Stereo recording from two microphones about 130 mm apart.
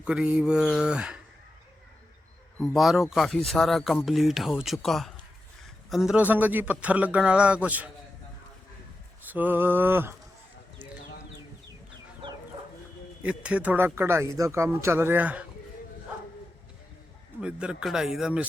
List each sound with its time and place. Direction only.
0.0 s a man's voice: 10° right (ahead or behind)
2.6 s a man's voice: centre (ahead or behind)
9.3 s a man's voice: 15° right (ahead or behind)
13.2 s a man's voice: 10° right (ahead or behind)
17.4 s a man's voice: 5° right (ahead or behind)